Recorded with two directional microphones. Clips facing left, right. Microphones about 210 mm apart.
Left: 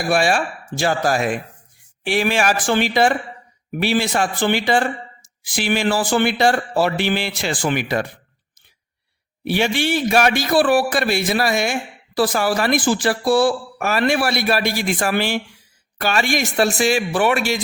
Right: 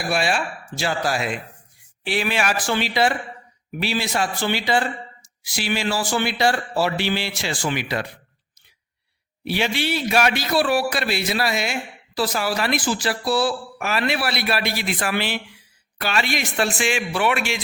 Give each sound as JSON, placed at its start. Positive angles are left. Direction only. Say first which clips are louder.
{"t": 0.1, "sound": "a man's voice", "louder": "left 5 dB", "side_deg": 45}
{"t": 9.4, "sound": "a man's voice", "louder": "left 4 dB", "side_deg": 50}